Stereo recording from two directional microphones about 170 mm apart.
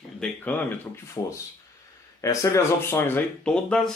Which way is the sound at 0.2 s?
10° left (ahead or behind).